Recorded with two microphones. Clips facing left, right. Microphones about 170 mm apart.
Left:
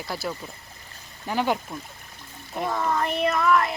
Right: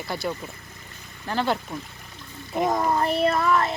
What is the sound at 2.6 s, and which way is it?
A child's voice, 40° right (ahead or behind).